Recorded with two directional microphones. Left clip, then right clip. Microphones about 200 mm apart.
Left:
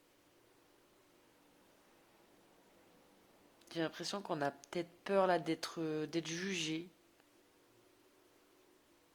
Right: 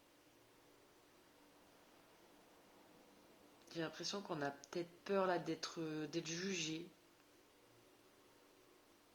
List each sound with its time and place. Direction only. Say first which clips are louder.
3.7 s speech: left 5 dB; 40° left (ahead or behind)